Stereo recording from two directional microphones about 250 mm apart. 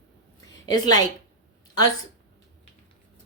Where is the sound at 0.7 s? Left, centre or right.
Centre.